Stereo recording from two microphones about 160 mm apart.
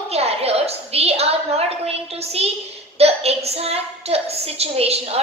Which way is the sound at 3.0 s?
40° right (ahead or behind).